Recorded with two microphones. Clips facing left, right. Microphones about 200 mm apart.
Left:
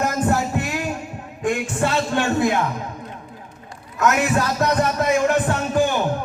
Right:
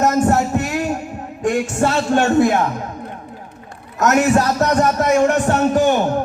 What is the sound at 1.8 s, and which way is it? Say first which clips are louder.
Speech: right 5 dB; 45° right (ahead or behind).